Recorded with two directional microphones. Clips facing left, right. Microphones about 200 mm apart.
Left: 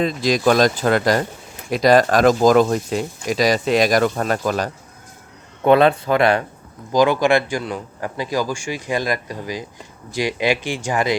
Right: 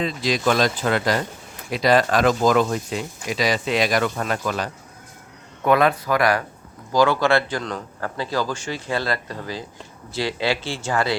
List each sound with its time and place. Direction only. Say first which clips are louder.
0.0 s speech: left 4 dB; 45° left (ahead or behind)
5.6 s speech: left 4 dB; 30° left (ahead or behind)